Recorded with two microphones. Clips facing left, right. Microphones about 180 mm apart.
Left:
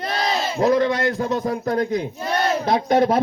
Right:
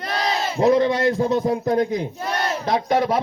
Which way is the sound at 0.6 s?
25° right (ahead or behind).